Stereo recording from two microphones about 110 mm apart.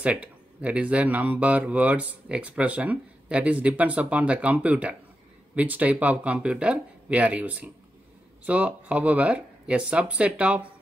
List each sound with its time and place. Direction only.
0.0 s speech: 10° right (ahead or behind)